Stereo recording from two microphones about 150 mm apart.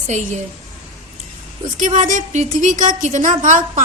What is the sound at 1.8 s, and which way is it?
A woman's voice, 55° right (ahead or behind).